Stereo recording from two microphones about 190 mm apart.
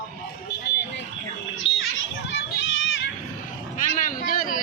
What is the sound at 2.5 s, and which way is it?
Children playing, 90° left.